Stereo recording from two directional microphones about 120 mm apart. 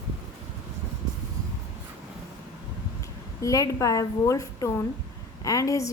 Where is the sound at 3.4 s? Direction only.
30° left (ahead or behind).